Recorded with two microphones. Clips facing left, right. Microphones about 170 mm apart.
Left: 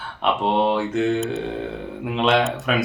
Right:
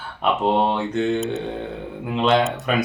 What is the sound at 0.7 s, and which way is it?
Speech, centre (ahead or behind).